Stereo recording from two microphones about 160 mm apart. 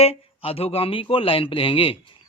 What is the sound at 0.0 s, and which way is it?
Speech, 40° left (ahead or behind).